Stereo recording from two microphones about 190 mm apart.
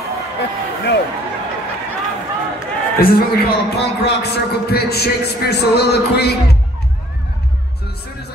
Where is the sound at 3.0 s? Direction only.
50° left (ahead or behind).